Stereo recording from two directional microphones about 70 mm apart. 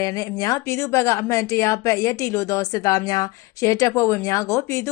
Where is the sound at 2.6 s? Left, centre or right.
Left.